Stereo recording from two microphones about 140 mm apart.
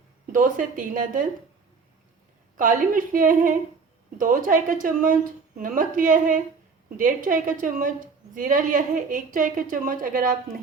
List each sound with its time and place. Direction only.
0.3 s a woman's voice: 75° right (ahead or behind)
2.6 s a woman's voice: 70° right (ahead or behind)